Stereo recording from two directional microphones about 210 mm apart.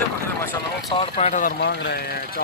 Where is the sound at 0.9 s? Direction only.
30° left (ahead or behind); by 2.0 s 50° left (ahead or behind).